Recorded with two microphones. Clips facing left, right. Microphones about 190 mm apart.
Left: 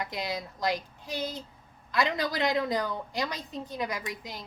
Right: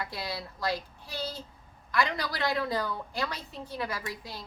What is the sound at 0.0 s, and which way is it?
A woman's voice, 20° left (ahead or behind).